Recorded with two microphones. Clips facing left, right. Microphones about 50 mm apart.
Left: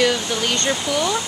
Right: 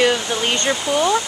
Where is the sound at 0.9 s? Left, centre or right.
Right.